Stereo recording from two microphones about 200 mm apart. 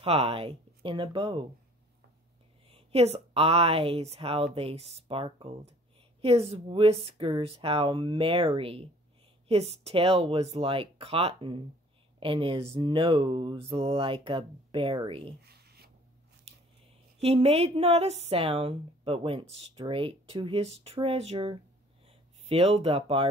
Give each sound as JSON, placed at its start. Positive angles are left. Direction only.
{"t": 0.0, "sound": "mantra", "side_deg": -30}
{"t": 2.7, "sound": "mantra", "side_deg": -30}
{"t": 15.4, "sound": "writing", "side_deg": -55}
{"t": 17.2, "sound": "mantra", "side_deg": -30}
{"t": 22.5, "sound": "speech", "side_deg": -30}